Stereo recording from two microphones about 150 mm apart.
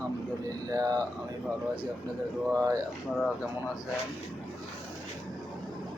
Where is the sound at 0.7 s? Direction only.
25° right (ahead or behind).